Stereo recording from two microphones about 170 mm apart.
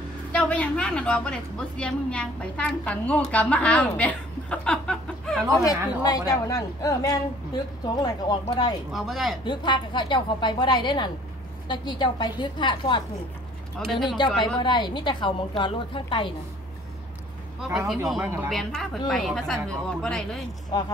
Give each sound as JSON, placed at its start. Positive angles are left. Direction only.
{"t": 0.3, "sound": "a woman's voice", "side_deg": 5}
{"t": 5.5, "sound": "a woman's voice", "side_deg": 20}
{"t": 8.9, "sound": "a woman's voice", "side_deg": 0}
{"t": 9.4, "sound": "a woman's voice", "side_deg": 25}
{"t": 13.7, "sound": "a woman's voice", "side_deg": 5}
{"t": 14.0, "sound": "a woman's voice", "side_deg": 25}
{"t": 17.7, "sound": "a woman's voice", "side_deg": 0}